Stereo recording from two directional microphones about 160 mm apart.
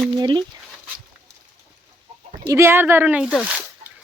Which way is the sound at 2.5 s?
15° right (ahead or behind).